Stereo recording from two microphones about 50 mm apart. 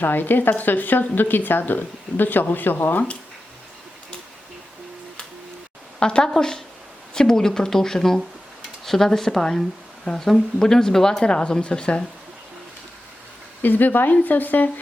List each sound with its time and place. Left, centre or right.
0.0 s speech: left
6.0 s a woman's voice: centre
6.2 s speech: centre
13.6 s speech: left